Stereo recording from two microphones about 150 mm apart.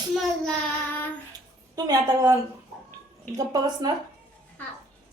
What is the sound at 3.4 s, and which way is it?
Speech, 25° right (ahead or behind).